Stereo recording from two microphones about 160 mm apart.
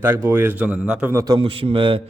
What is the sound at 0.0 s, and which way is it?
A man's voice, 15° right (ahead or behind).